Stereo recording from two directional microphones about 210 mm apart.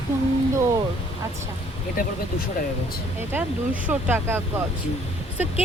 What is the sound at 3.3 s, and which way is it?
Speech, 10° right (ahead or behind).